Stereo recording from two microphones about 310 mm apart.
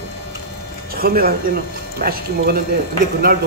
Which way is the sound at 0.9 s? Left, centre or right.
Right.